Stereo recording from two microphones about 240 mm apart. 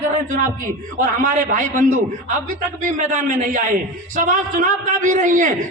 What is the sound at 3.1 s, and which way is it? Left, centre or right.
A man's voice, right.